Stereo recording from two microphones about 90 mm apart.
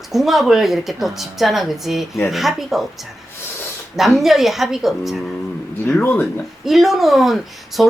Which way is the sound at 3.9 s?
5° right (ahead or behind).